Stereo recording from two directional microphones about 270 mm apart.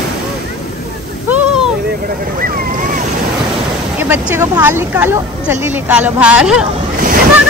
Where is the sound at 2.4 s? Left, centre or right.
Right.